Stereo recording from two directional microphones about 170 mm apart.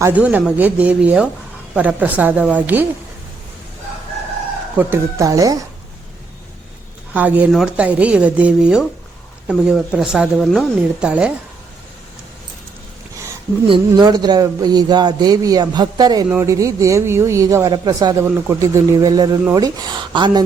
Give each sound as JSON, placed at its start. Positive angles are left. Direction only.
{"t": 0.0, "sound": "a woman's voice", "side_deg": -10}
{"t": 4.8, "sound": "speech", "side_deg": -15}
{"t": 7.1, "sound": "a woman's voice", "side_deg": -10}
{"t": 13.7, "sound": "speech", "side_deg": -25}